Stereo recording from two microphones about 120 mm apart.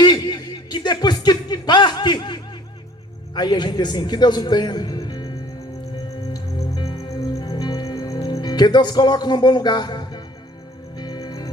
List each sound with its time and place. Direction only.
0.0 s a sound: 35° left (ahead or behind)
3.3 s a man's voice: 35° left (ahead or behind)
6.3 s music: 30° left (ahead or behind)